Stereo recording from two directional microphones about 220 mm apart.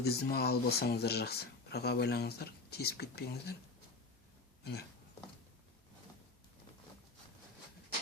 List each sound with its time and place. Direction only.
0.0 s speech: 45° left (ahead or behind)
4.6 s speech: 45° left (ahead or behind)